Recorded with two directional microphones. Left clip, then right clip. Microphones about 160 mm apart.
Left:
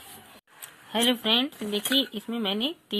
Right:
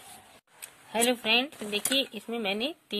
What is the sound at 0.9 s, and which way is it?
Speech, 30° right (ahead or behind).